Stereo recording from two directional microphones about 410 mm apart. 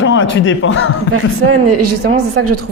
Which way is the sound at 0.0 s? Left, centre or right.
Left.